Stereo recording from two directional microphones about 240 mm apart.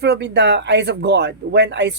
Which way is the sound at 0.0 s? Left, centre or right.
Right.